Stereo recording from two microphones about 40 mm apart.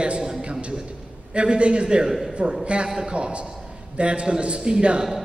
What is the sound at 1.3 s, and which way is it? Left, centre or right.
A man's voice, right.